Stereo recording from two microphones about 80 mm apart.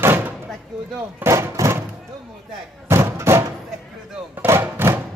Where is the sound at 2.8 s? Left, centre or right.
Right.